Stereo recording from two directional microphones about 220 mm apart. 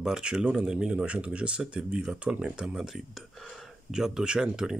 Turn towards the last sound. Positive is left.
turn(degrees=-5)  # may be behind; listen again after turning